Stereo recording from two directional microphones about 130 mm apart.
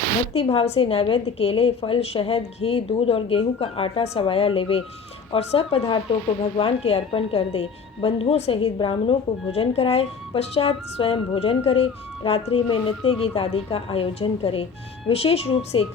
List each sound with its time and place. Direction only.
0.3 s a woman's voice: 50° left (ahead or behind)